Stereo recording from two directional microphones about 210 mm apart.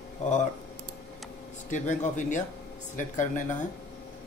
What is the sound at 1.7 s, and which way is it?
Speech, 35° left (ahead or behind).